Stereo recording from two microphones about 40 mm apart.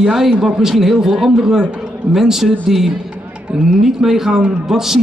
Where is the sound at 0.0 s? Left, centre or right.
Centre.